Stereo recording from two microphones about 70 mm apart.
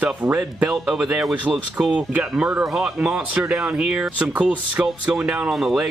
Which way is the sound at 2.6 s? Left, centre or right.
Centre.